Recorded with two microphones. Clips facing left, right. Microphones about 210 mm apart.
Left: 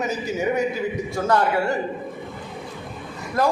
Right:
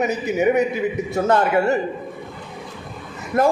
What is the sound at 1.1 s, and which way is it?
Speech, 20° right (ahead or behind).